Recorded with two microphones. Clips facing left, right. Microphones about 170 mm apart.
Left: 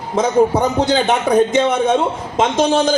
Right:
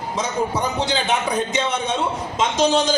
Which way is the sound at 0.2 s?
50° left (ahead or behind).